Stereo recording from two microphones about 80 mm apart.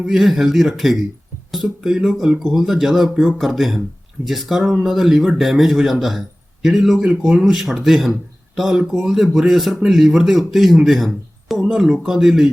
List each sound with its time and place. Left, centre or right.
0.1 s speech: centre